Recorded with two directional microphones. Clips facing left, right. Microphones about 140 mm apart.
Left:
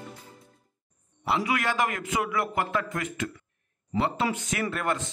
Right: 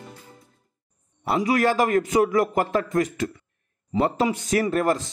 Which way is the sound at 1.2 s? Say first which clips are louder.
Right 6 dB; 40° right (ahead or behind).